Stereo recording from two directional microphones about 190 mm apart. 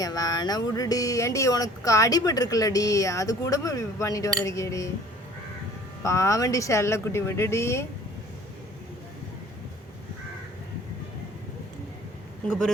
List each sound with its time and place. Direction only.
0.0 s speech: 20° left (ahead or behind)
6.0 s speech: 15° left (ahead or behind)
12.5 s speech: 5° left (ahead or behind)